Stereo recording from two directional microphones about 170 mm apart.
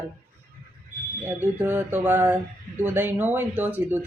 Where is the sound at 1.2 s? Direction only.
10° right (ahead or behind).